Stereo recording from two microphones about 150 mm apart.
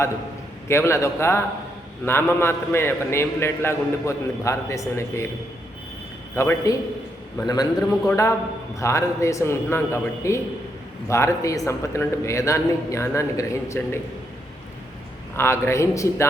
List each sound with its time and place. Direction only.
0.7 s a man's voice: 15° left (ahead or behind)
6.3 s a man's voice: 20° left (ahead or behind)
15.4 s a man's voice: 15° left (ahead or behind)